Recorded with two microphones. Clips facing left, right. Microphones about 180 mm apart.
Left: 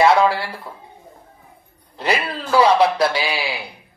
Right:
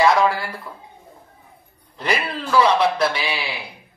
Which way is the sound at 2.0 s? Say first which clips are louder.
Left 2 dB; 30° left (ahead or behind).